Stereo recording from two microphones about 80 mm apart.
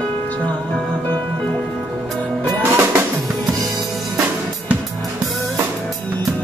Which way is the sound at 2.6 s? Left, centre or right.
Right.